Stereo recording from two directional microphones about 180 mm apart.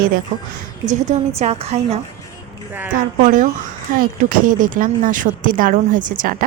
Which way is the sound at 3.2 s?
45° right (ahead or behind).